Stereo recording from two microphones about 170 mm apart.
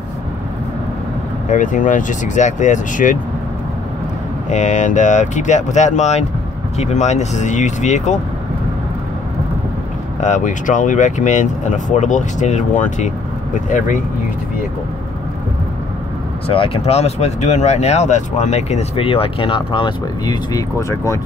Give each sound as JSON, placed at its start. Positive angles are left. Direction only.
{"t": 1.5, "sound": "speech", "side_deg": 50}
{"t": 4.5, "sound": "speech", "side_deg": 45}
{"t": 10.2, "sound": "speech", "side_deg": 45}
{"t": 16.4, "sound": "speech", "side_deg": 35}